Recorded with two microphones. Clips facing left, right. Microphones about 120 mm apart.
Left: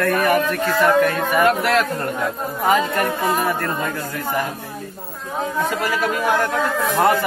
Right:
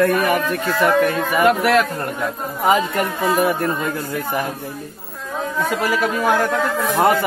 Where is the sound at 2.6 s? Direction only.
20° right (ahead or behind).